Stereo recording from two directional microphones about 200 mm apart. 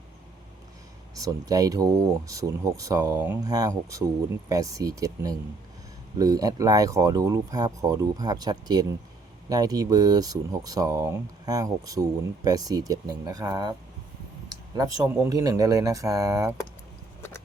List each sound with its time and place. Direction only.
1.1 s speech: 20° right (ahead or behind)
14.5 s a sound: 20° right (ahead or behind)
15.1 s speech: 15° right (ahead or behind)